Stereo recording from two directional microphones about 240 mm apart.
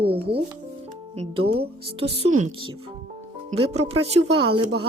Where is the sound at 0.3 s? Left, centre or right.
Right.